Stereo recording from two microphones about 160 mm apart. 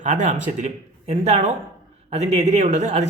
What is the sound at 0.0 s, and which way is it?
Speech, 50° right (ahead or behind).